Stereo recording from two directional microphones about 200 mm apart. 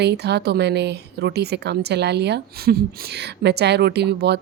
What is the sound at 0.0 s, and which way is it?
Speech, 55° right (ahead or behind).